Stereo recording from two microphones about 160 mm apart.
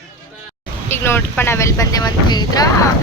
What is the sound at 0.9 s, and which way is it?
Speech, 15° left (ahead or behind).